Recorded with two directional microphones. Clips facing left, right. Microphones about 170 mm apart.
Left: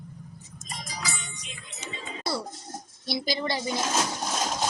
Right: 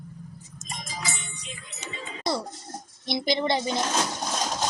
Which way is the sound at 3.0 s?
20° right (ahead or behind).